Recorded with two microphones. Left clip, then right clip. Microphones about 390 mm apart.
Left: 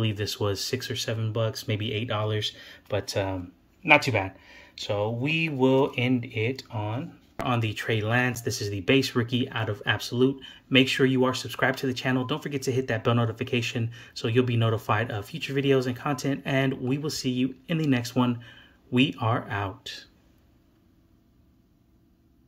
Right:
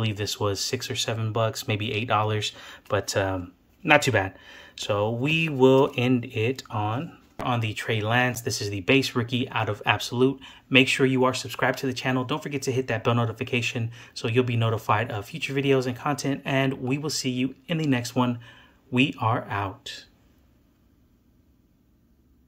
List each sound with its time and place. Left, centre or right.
0.0 s speech: centre
4.7 s speech: centre
7.3 s speech: centre